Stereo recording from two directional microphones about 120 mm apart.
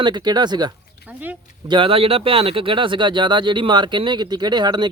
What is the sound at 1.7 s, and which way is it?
Speech, 45° right (ahead or behind).